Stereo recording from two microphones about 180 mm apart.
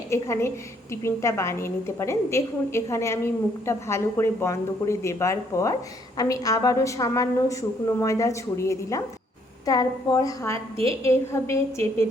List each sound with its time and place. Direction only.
0.1 s a woman's voice: 15° left (ahead or behind)